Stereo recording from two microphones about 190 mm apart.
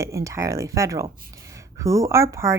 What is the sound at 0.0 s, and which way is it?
Speech, 15° right (ahead or behind).